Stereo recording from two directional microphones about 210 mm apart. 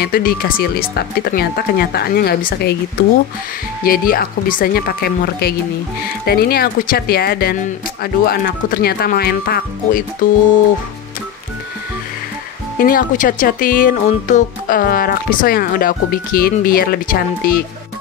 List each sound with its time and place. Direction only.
0.0 s speech: 45° left (ahead or behind)
3.8 s speech: 45° left (ahead or behind)
12.7 s speech: 40° left (ahead or behind)